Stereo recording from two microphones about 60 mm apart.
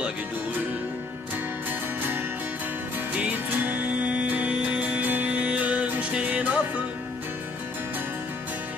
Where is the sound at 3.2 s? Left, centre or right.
Right.